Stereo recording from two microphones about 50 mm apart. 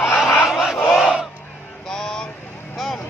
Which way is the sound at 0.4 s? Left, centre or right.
Centre.